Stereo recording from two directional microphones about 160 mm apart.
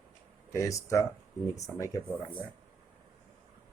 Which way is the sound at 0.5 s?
20° left (ahead or behind).